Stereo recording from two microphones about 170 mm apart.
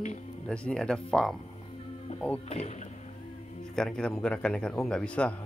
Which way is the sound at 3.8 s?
5° left (ahead or behind).